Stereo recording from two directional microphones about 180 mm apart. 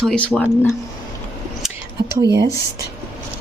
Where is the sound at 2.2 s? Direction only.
20° right (ahead or behind).